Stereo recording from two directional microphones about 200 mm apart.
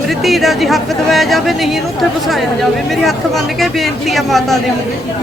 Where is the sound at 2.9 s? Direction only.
Centre (ahead or behind).